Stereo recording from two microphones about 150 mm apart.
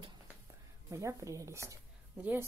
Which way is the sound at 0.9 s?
20° right (ahead or behind).